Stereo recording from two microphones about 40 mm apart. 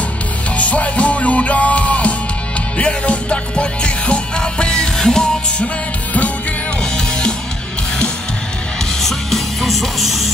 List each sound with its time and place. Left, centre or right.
0.6 s music: left; by 5.2 s centre
9.0 s music: centre